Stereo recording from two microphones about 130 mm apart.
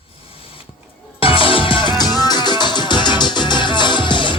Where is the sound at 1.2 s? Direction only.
45° left (ahead or behind).